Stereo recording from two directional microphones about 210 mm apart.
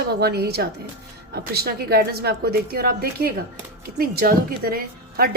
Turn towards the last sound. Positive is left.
turn(degrees=-45)  # may be behind; listen again after turning